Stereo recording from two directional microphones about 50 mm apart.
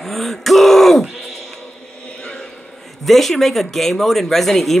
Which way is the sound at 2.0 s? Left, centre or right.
Left.